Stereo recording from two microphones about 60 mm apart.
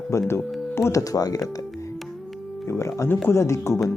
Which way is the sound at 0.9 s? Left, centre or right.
Left.